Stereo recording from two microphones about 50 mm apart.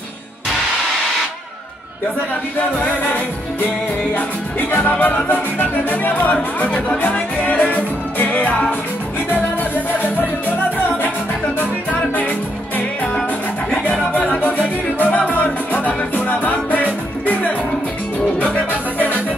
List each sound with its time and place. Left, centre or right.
4.1 s music: left
6.3 s speech: left
11.0 s music: left
14.4 s music: left